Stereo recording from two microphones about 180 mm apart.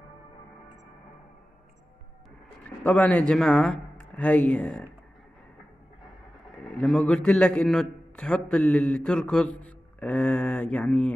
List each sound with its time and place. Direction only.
2.8 s speech: 5° left (ahead or behind)
6.5 s a man's voice: 5° left (ahead or behind)